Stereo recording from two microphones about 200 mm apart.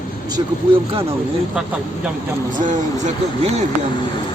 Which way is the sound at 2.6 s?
40° right (ahead or behind).